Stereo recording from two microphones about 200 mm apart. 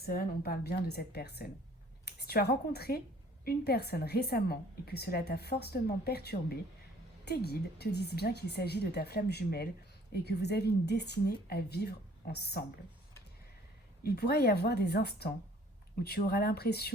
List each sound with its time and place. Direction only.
0.0 s a woman's voice: 50° left (ahead or behind)
14.0 s a woman's voice: 55° left (ahead or behind)